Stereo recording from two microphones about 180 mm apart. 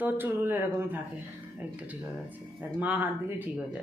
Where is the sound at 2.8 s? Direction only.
10° right (ahead or behind).